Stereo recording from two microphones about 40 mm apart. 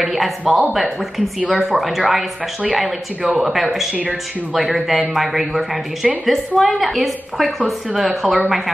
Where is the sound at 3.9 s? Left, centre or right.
Right.